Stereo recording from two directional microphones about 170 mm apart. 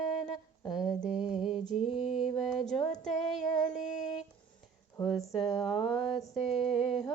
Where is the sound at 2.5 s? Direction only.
Centre (ahead or behind).